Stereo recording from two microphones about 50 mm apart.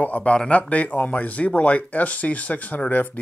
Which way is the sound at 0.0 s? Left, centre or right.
Left.